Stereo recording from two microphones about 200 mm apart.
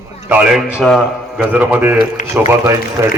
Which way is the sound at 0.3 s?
5° right (ahead or behind).